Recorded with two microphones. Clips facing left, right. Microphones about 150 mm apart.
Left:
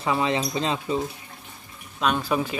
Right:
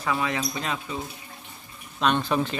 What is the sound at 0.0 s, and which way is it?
Speech, 25° left (ahead or behind).